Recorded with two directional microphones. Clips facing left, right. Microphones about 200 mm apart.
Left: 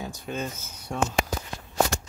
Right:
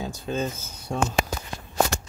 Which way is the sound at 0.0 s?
30° right (ahead or behind).